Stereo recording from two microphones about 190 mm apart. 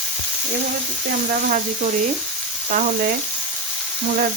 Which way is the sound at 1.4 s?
45° right (ahead or behind).